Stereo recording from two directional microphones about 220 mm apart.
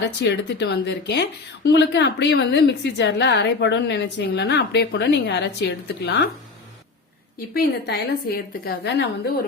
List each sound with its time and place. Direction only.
0.0 s speech: 50° left (ahead or behind)
7.3 s speech: 45° left (ahead or behind)